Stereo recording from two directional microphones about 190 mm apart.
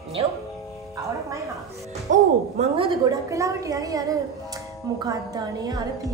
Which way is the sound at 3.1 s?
15° right (ahead or behind).